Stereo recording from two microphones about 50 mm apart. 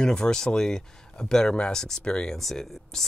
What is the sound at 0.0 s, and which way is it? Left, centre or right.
Speech, centre.